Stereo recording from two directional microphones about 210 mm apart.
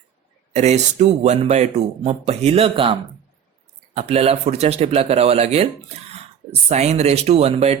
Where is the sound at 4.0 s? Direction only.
30° right (ahead or behind).